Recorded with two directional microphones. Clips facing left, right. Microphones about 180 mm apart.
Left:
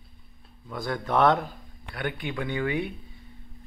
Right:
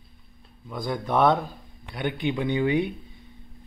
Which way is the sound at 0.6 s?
15° right (ahead or behind).